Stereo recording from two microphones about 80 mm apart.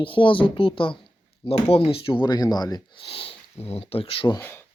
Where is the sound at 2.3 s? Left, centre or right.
Left.